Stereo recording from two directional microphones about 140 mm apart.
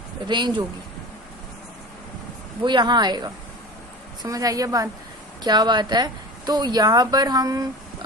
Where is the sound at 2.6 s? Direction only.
30° right (ahead or behind).